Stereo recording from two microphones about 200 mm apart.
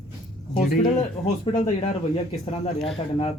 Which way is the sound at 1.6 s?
30° left (ahead or behind).